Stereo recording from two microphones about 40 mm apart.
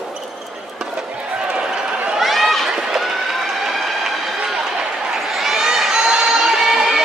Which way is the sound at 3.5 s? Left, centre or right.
Centre.